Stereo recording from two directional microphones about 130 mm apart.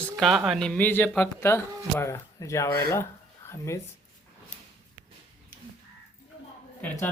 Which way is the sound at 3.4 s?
20° left (ahead or behind).